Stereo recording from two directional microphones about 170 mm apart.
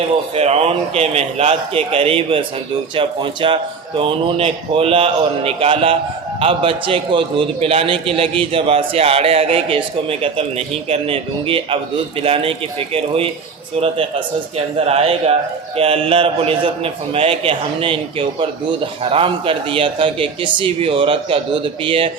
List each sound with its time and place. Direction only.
0.3 s a man's voice: 40° right (ahead or behind)
14.8 s a man's voice: 35° right (ahead or behind)